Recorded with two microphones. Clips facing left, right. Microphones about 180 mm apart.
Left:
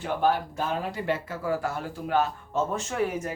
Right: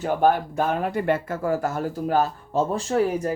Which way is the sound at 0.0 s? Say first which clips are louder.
Right 5 dB; 50° right (ahead or behind).